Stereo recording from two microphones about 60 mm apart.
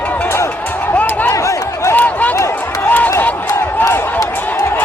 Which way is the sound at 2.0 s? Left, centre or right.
Left.